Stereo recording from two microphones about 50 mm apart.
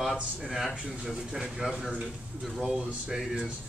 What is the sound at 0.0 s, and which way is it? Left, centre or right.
Speech, centre.